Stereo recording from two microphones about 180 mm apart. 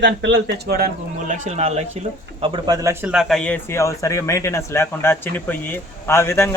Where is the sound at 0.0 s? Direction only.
75° right (ahead or behind).